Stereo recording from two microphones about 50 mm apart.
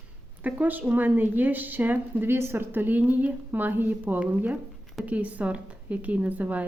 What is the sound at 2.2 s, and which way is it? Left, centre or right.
A woman's voice, right.